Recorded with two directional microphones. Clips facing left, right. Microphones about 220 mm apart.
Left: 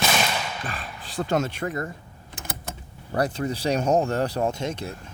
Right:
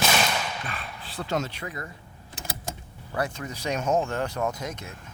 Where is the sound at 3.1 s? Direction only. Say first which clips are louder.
Left 6 dB; 35° left (ahead or behind).